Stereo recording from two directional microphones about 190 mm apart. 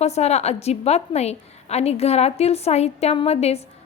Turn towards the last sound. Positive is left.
turn(degrees=35)  # may be behind; listen again after turning